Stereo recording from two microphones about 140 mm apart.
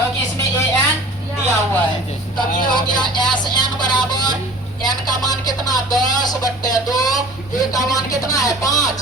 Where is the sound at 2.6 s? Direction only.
30° left (ahead or behind).